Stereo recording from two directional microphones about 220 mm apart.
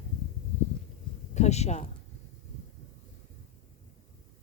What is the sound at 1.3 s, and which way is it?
Speech, 30° left (ahead or behind).